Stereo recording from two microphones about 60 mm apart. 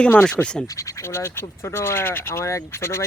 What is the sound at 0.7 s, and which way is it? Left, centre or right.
Speech, left.